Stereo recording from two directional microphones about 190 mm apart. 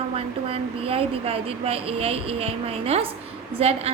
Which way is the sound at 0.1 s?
30° right (ahead or behind).